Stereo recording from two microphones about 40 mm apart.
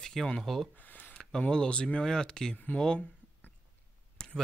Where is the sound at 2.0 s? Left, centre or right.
Centre.